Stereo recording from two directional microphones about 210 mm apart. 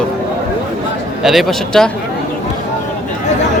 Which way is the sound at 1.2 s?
Centre (ahead or behind).